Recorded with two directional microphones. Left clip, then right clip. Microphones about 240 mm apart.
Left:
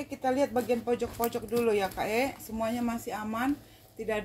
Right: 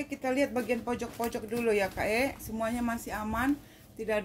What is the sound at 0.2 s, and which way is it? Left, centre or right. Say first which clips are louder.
Speech: left 2 dB; centre.